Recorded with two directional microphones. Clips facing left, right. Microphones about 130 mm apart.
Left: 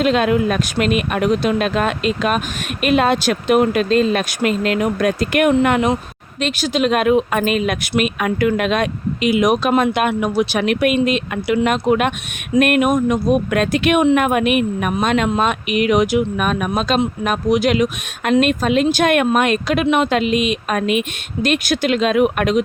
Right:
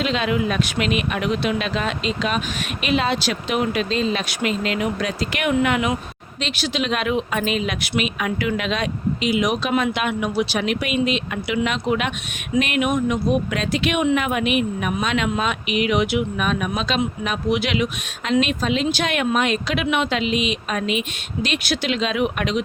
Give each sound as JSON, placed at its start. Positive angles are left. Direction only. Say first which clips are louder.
{"t": 0.0, "sound": "speech", "louder": "left 6 dB", "side_deg": 50}